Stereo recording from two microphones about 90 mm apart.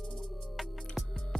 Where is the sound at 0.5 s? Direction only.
Centre (ahead or behind).